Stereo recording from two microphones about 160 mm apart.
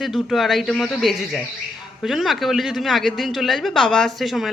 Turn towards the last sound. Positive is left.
turn(degrees=0)  # may be behind; listen again after turning